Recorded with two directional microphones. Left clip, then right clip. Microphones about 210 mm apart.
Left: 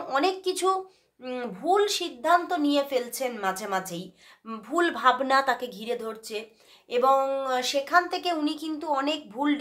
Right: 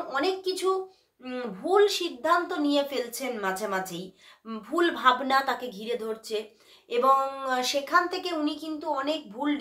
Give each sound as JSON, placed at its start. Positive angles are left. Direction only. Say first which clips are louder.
{"t": 0.1, "sound": "a woman's voice", "louder": "left 3 dB", "side_deg": 45}